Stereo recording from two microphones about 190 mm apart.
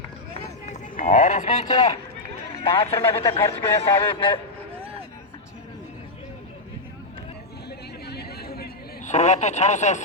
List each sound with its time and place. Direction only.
0.6 s clip-clop: 40° left (ahead or behind)
2.6 s speech: 30° left (ahead or behind)
8.0 s chatter: 55° left (ahead or behind)
9.0 s speech: 40° left (ahead or behind)